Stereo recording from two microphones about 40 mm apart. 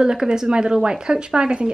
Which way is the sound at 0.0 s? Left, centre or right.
Centre.